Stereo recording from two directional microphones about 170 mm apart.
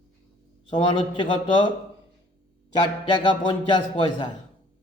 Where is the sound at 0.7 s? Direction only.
30° left (ahead or behind).